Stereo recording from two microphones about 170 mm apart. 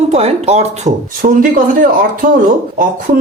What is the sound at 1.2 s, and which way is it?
Speech, 50° right (ahead or behind).